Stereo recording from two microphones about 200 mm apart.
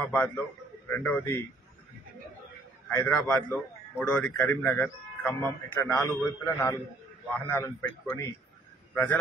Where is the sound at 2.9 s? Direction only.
10° left (ahead or behind).